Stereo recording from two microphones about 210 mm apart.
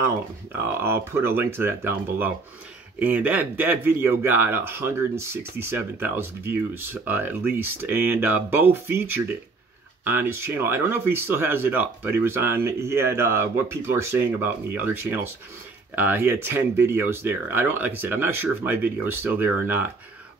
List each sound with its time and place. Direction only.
0.7 s speech: 10° right (ahead or behind)